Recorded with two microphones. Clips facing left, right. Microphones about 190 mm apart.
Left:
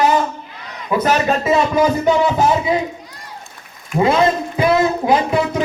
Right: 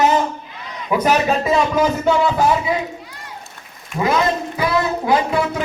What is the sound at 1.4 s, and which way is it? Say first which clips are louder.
Music: left 2 dB; 5° left (ahead or behind).